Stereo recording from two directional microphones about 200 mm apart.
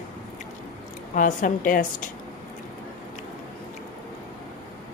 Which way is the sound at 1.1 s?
40° left (ahead or behind).